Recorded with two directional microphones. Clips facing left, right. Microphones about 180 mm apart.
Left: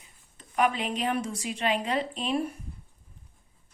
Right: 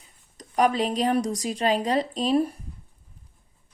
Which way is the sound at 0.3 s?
35° right (ahead or behind).